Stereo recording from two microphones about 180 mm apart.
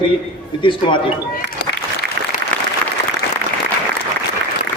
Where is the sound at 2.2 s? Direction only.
70° right (ahead or behind).